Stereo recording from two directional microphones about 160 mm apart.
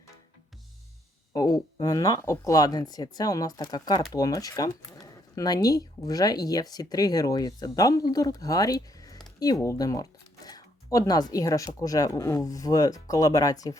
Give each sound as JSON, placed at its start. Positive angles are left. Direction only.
{"t": 1.3, "sound": "speech", "side_deg": 25}